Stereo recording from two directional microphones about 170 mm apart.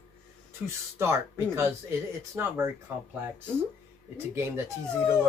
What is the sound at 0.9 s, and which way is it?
Speech, 15° right (ahead or behind).